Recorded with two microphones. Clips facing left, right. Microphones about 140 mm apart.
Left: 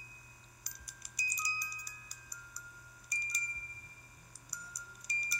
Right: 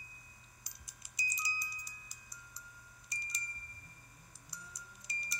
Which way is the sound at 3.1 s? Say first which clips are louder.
Left 3 dB; 25° right (ahead or behind).